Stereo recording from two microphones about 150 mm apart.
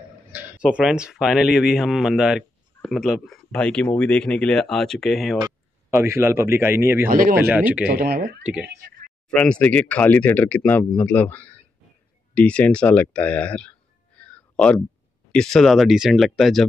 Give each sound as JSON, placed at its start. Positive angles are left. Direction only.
{"t": 0.3, "sound": "speech", "side_deg": -10}
{"t": 5.4, "sound": "speech", "side_deg": -15}
{"t": 7.1, "sound": "speech", "side_deg": -70}
{"t": 7.3, "sound": "speech", "side_deg": -10}
{"t": 7.8, "sound": "speech", "side_deg": -90}
{"t": 9.3, "sound": "speech", "side_deg": 5}